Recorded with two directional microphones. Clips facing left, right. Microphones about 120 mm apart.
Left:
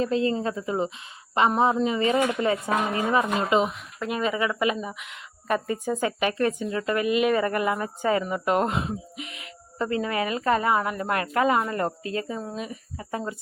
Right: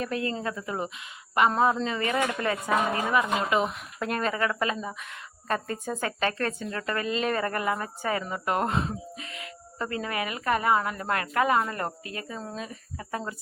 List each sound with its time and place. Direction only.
0.0 s speech: 25° left (ahead or behind)
3.7 s speech: 5° left (ahead or behind); by 13.3 s 25° left (ahead or behind)